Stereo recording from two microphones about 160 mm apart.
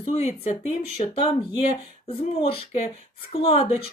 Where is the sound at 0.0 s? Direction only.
40° left (ahead or behind).